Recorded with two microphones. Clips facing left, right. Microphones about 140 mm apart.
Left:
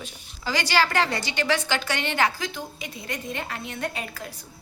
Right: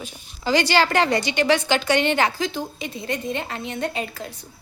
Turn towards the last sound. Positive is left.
turn(degrees=-25)  # may be behind; listen again after turning